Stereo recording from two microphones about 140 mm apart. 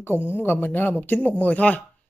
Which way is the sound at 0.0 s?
15° left (ahead or behind).